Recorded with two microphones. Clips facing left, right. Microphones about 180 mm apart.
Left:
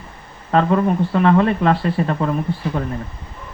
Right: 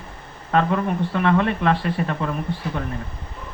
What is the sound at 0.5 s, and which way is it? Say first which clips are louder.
Speech: left 4 dB; 35° left (ahead or behind).